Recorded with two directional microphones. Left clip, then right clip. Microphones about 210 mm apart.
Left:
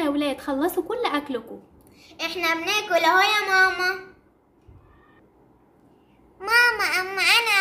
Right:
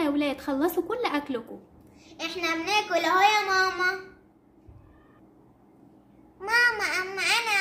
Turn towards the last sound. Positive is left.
turn(degrees=40)  # may be behind; listen again after turning